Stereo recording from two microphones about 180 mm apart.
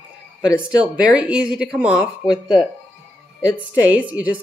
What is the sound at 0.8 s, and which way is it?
A woman's voice, 5° right (ahead or behind).